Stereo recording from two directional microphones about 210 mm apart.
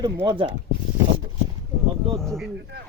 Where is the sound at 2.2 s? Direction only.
Centre (ahead or behind).